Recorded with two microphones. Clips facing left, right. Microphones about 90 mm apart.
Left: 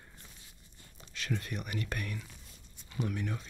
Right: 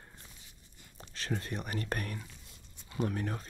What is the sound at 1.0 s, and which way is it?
Speech, 35° right (ahead or behind).